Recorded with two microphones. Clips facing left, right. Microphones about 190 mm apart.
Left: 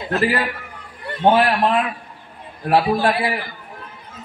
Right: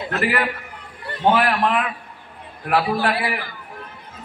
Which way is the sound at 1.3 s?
25° left (ahead or behind).